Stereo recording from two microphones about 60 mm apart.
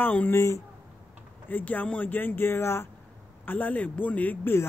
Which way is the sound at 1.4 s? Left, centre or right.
Left.